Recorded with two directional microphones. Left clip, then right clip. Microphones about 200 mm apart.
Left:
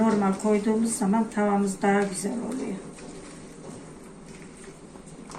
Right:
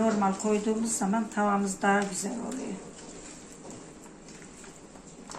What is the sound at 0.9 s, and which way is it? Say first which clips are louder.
A woman's voice: left 3 dB; 15° right (ahead or behind).